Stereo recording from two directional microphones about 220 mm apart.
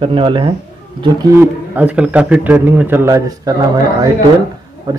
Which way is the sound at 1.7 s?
5° right (ahead or behind).